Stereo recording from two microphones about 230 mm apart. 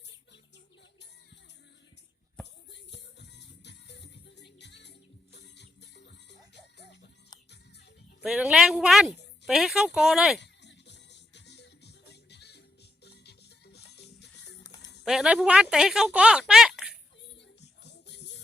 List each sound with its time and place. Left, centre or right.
2.4 s music: centre
2.7 s music: left
8.2 s a woman's voice: centre
10.4 s music: left
13.7 s music: left
14.6 s music: centre
15.0 s speech: centre
17.2 s music: left